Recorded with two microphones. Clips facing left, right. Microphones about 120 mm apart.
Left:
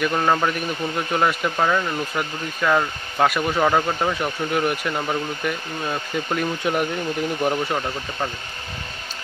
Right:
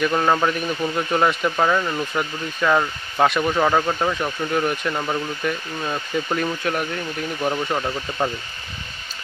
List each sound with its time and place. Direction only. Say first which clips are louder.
0.0 s speech: right 1 dB; centre (ahead or behind)
6.6 s speech: left 2 dB; 15° left (ahead or behind)
7.5 s speech: even; 5° left (ahead or behind)
8.2 s speech: right 4 dB; 15° right (ahead or behind)